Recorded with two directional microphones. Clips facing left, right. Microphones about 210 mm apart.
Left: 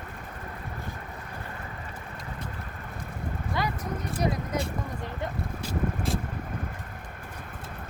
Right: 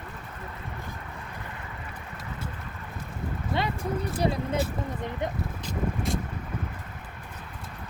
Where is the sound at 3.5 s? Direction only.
25° right (ahead or behind).